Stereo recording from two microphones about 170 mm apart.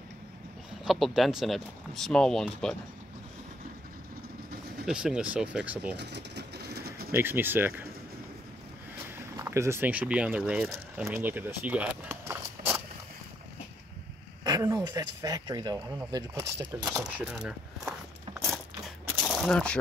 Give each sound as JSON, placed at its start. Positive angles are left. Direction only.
{"t": 0.8, "sound": "speech", "side_deg": 0}
{"t": 4.8, "sound": "speech", "side_deg": -5}
{"t": 5.9, "sound": "bird", "side_deg": -80}
{"t": 7.1, "sound": "speech", "side_deg": -15}
{"t": 9.4, "sound": "speech", "side_deg": -15}
{"t": 14.4, "sound": "speech", "side_deg": -20}
{"t": 17.2, "sound": "keys jangling", "side_deg": -5}
{"t": 19.3, "sound": "speech", "side_deg": 5}